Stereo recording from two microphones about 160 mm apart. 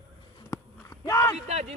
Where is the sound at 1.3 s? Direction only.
45° right (ahead or behind).